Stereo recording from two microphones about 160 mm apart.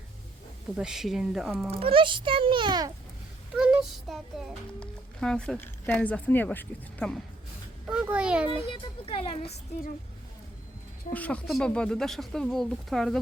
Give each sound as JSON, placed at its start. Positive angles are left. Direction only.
{"t": 0.8, "sound": "a child's voice", "side_deg": -5}
{"t": 1.7, "sound": "a child's voice", "side_deg": -35}
{"t": 3.5, "sound": "a child's voice", "side_deg": -5}
{"t": 8.1, "sound": "a child's voice", "side_deg": -5}
{"t": 8.7, "sound": "speech", "side_deg": 35}
{"t": 11.1, "sound": "a child's voice", "side_deg": 10}